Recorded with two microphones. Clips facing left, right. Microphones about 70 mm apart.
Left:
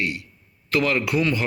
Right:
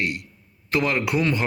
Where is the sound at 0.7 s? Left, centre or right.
Right.